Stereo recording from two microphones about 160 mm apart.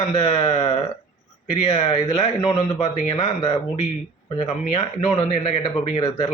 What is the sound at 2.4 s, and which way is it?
Speech, 40° left (ahead or behind).